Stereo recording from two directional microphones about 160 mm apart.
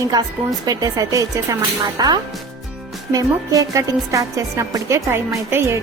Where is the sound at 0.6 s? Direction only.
20° right (ahead or behind).